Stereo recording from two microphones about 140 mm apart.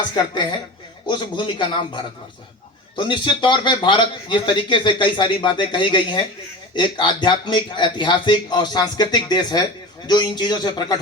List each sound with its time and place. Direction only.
1.0 s a man's voice: 35° left (ahead or behind)